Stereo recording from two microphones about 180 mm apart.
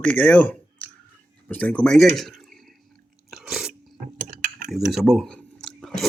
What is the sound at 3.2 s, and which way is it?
Chewing, centre (ahead or behind).